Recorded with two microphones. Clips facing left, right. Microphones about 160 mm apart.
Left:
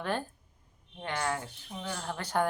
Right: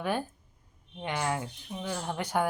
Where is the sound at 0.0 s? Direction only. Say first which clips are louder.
Right 2 dB; 10° right (ahead or behind).